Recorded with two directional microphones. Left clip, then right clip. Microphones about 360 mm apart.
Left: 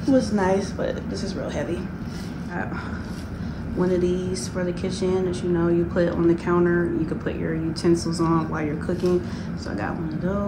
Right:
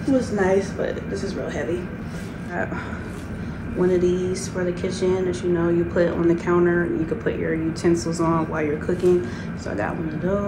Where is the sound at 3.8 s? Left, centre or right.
Centre.